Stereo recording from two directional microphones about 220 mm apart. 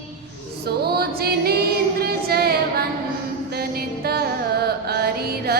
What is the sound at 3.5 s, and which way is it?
Music, 45° right (ahead or behind).